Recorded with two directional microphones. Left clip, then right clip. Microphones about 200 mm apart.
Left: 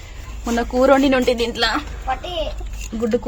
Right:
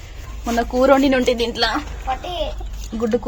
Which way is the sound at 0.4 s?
10° left (ahead or behind).